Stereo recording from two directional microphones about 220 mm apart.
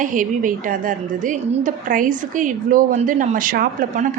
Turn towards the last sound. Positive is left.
turn(degrees=-35)  # may be behind; listen again after turning